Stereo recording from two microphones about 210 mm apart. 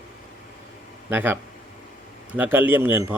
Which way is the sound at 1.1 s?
10° right (ahead or behind).